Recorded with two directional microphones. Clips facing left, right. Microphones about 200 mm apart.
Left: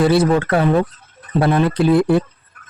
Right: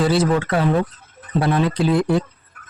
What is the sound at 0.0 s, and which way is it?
Speech, 60° left (ahead or behind).